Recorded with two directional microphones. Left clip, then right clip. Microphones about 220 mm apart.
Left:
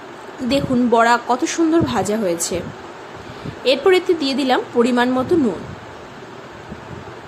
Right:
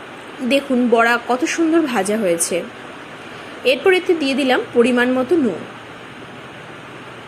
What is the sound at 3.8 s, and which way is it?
A woman's voice, 10° left (ahead or behind).